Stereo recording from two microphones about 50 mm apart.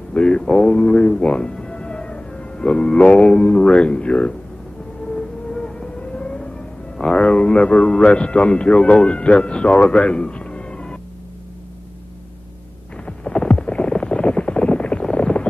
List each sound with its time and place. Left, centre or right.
0.1 s a man's voice: left
5.1 s siren: centre
7.0 s a man's voice: centre
13.0 s a sound: centre
15.1 s boat: left